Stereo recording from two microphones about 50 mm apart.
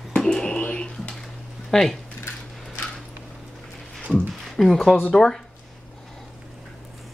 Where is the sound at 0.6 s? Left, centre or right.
Left.